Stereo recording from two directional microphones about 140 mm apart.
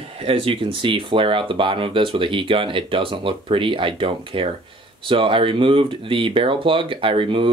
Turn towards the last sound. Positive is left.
turn(degrees=-40)  # may be behind; listen again after turning